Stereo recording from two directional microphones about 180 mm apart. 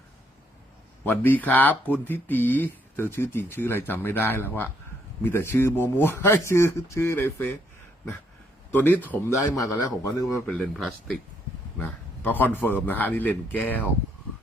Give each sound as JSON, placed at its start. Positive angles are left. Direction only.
{"t": 1.0, "sound": "a man's voice", "side_deg": 10}
{"t": 8.8, "sound": "a man's voice", "side_deg": 10}
{"t": 10.4, "sound": "a man's voice", "side_deg": 5}